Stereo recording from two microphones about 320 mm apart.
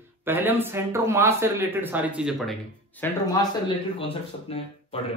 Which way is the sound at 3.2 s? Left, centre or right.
Centre.